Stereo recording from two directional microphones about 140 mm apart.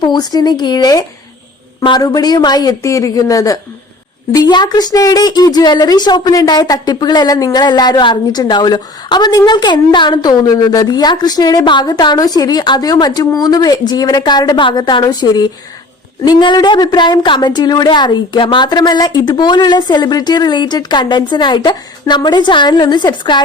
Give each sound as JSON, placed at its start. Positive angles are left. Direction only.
{"t": 0.0, "sound": "a woman's voice", "side_deg": 30}